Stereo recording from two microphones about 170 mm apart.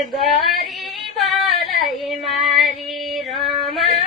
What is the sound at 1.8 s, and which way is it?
Child singing, centre (ahead or behind).